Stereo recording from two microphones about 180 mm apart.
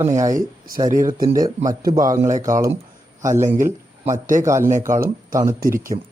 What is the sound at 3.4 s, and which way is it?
Speech, 45° right (ahead or behind).